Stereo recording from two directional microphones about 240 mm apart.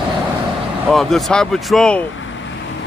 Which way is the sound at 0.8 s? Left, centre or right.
Centre.